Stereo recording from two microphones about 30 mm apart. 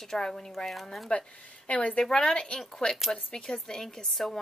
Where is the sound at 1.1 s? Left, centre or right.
Left.